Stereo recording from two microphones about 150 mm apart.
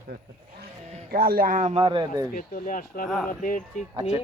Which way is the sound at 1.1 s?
85° right.